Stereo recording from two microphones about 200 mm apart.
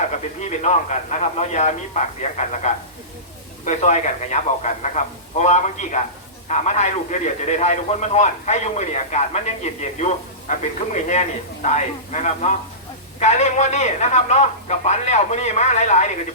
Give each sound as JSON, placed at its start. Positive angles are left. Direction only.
{"t": 0.2, "sound": "a man's voice", "side_deg": 35}